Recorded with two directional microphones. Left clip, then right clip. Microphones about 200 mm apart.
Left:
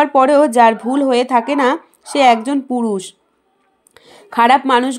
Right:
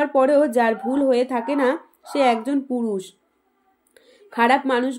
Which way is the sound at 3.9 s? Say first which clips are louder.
Left 10 dB; 20° left (ahead or behind).